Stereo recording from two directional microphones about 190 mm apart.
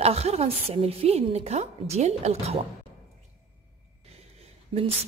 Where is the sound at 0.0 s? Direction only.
35° right (ahead or behind).